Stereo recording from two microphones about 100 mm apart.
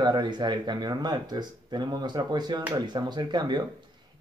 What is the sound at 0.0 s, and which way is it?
Speech, 45° right (ahead or behind).